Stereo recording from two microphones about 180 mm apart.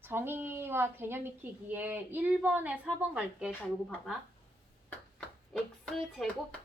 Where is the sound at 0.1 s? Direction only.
10° right (ahead or behind).